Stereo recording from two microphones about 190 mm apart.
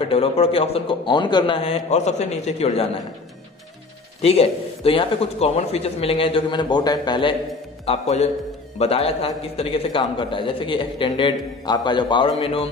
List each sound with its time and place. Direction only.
0.1 s speech: 30° left (ahead or behind)
4.2 s a man's voice: 30° left (ahead or behind)